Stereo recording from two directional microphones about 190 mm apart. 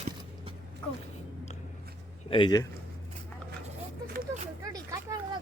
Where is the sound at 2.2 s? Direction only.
25° left (ahead or behind).